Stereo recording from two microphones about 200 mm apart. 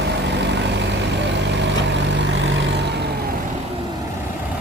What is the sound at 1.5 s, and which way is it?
Vehicle, 60° right (ahead or behind).